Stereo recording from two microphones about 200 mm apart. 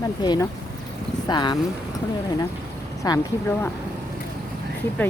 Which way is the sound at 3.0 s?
20° left (ahead or behind).